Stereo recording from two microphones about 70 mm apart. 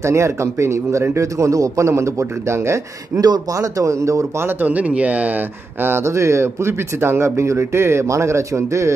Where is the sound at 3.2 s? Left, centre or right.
Right.